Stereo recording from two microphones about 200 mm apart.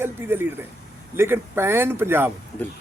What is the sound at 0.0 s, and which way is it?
Speech, 10° right (ahead or behind).